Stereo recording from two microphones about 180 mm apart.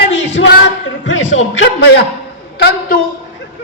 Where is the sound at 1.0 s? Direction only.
90° left.